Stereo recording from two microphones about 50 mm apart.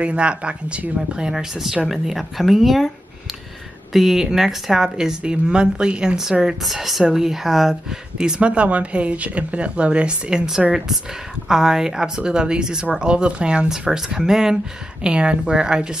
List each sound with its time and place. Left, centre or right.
0.0 s speech: right
1.3 s speech: centre
3.9 s speech: centre
8.2 s speech: centre